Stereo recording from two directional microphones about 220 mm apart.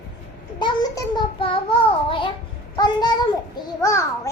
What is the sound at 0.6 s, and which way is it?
Child singing, 20° left (ahead or behind).